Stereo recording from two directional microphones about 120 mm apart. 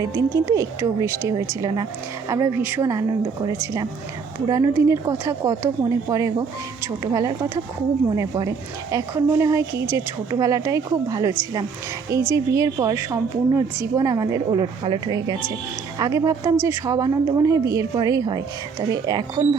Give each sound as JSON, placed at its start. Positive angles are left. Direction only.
{"t": 0.0, "sound": "a woman's voice", "side_deg": -25}
{"t": 3.4, "sound": "speech", "side_deg": -30}
{"t": 14.6, "sound": "a woman's voice", "side_deg": -40}